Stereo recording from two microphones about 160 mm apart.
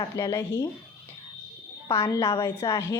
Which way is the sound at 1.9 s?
15° left (ahead or behind).